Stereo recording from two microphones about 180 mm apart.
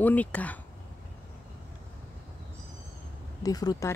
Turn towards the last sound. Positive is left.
turn(degrees=20)  # may be behind; listen again after turning